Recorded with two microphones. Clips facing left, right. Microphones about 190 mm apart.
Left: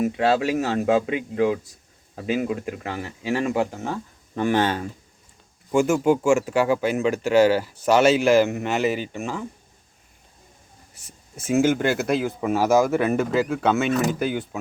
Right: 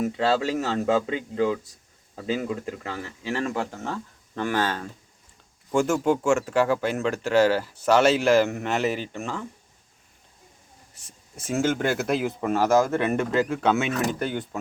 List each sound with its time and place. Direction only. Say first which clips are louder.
0.0 s speech: left 3 dB; 15° left (ahead or behind)
4.4 s speech: left 5 dB; 20° left (ahead or behind)
5.7 s speech: left 3 dB; 5° left (ahead or behind)
10.9 s speech: left 3 dB; 5° left (ahead or behind)